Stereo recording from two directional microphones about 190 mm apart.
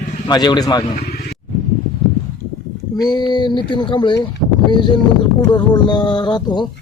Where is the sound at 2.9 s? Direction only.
20° left (ahead or behind).